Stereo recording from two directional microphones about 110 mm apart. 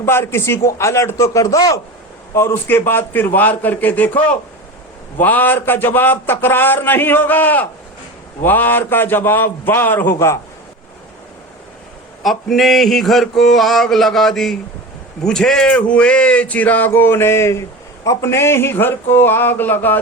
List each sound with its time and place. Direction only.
0.0 s a man's voice: 20° left (ahead or behind)
12.2 s a sound: centre (ahead or behind)
15.2 s a man's voice: 5° left (ahead or behind)